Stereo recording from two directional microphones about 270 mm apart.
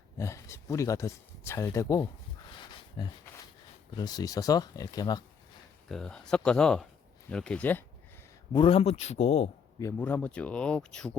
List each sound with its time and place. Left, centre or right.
0.2 s speech: centre
2.6 s a sound: centre
3.9 s speech: centre
5.9 s speech: centre
8.5 s a man's voice: centre
9.8 s speech: centre